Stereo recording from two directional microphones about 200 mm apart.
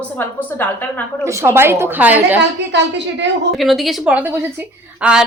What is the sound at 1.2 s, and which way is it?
A woman's voice, 15° right (ahead or behind).